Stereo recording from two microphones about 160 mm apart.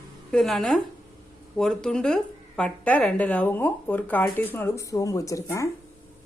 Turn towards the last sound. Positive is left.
turn(degrees=20)  # may be behind; listen again after turning